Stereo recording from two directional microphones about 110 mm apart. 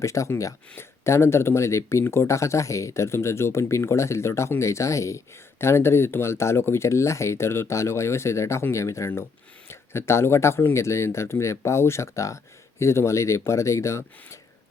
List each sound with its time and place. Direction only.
0.0 s speech: 30° left (ahead or behind)